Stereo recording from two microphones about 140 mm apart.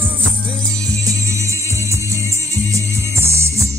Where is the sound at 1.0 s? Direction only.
25° right (ahead or behind).